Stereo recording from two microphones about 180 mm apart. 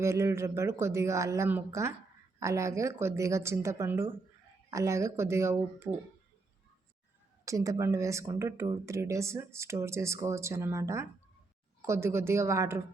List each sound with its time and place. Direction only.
0.0 s speech: 15° right (ahead or behind)
7.4 s speech: 20° right (ahead or behind)